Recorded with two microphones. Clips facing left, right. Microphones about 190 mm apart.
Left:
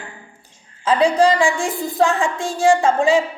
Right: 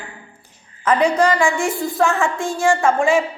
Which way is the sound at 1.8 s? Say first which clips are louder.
Left 2 dB; 15° left (ahead or behind).